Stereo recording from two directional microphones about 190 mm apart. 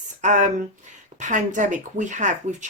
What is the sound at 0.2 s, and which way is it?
Speech, 40° right (ahead or behind).